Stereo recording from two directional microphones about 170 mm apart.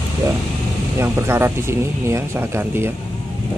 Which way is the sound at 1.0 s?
15° right (ahead or behind).